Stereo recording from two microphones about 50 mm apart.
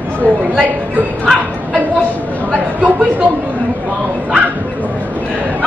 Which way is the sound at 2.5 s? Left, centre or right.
Right.